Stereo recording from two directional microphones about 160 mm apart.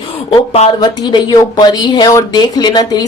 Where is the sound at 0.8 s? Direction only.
25° left (ahead or behind).